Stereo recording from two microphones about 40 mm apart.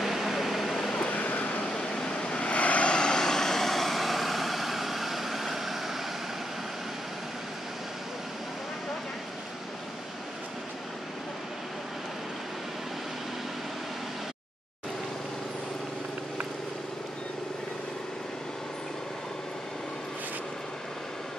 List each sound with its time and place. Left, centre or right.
0.0 s vehicle: centre
1.0 s vehicle: left
1.7 s vehicle: left
2.5 s vehicle: left; by 5.8 s centre